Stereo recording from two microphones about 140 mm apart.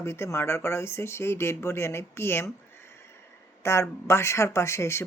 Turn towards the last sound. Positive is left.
turn(degrees=20)  # may be behind; listen again after turning